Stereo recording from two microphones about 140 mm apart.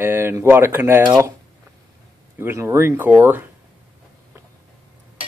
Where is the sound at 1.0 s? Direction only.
30° right (ahead or behind).